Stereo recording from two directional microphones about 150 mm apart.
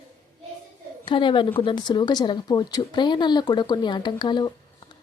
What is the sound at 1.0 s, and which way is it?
A woman's voice, 35° left (ahead or behind).